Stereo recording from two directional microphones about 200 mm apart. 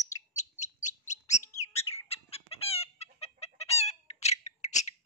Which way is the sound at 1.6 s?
30° left (ahead or behind).